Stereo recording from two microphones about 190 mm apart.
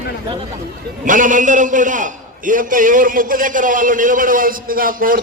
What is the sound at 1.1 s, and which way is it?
A man's voice, 45° right (ahead or behind).